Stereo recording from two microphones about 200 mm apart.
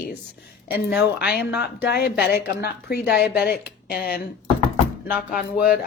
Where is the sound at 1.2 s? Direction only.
50° left (ahead or behind).